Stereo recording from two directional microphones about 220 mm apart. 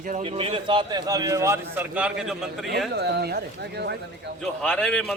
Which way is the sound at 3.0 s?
50° right (ahead or behind).